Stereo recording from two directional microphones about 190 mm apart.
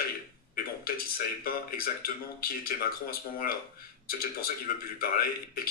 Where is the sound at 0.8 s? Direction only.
50° left (ahead or behind).